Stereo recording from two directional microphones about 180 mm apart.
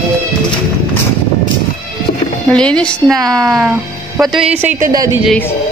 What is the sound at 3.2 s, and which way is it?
Speech, 20° right (ahead or behind).